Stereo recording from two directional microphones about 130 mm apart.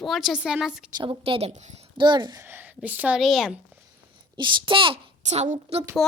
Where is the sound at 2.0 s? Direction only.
35° right (ahead or behind).